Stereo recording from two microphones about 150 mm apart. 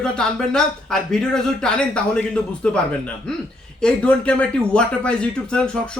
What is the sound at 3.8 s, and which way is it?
Speech, 5° left (ahead or behind).